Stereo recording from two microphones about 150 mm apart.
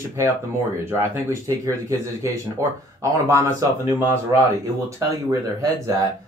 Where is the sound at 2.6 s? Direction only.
20° right (ahead or behind).